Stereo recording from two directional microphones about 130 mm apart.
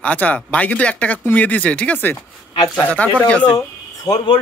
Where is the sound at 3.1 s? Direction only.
10° left (ahead or behind).